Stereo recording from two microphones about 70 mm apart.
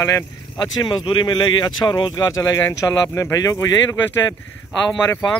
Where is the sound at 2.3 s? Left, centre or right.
Left.